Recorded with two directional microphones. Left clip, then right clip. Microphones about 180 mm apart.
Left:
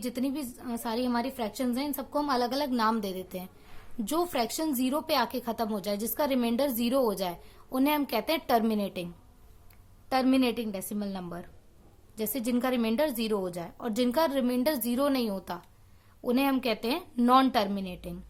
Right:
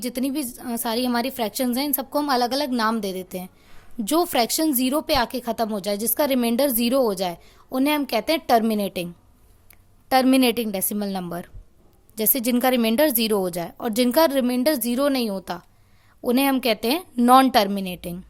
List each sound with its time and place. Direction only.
0.0 s a woman's voice: 40° right (ahead or behind)
10.1 s a woman's voice: 45° right (ahead or behind)